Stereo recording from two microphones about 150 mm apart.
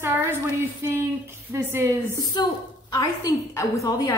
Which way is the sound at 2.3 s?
25° left (ahead or behind).